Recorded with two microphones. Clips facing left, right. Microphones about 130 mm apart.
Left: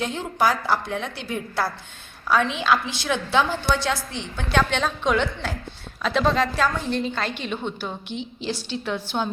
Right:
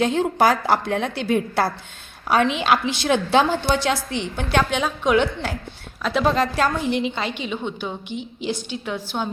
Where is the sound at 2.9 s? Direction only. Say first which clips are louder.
Right 4 dB; 20° right (ahead or behind).